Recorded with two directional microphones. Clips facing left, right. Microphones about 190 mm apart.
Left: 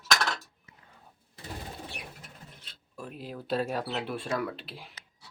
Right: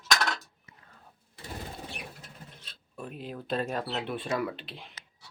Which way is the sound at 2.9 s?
5° right (ahead or behind).